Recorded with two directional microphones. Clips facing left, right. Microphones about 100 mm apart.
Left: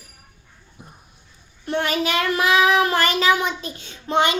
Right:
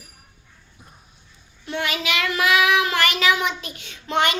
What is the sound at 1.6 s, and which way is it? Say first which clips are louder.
Child singing: left 4 dB; 40° left (ahead or behind).